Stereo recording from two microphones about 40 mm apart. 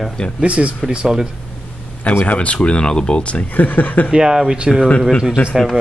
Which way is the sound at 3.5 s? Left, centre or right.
Left.